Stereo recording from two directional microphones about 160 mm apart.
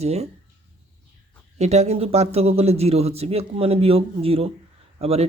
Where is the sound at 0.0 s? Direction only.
40° right (ahead or behind).